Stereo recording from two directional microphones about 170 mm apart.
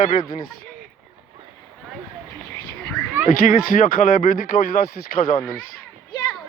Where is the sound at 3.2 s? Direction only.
50° left (ahead or behind).